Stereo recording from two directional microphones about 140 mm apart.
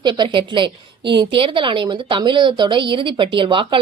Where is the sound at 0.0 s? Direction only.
35° right (ahead or behind).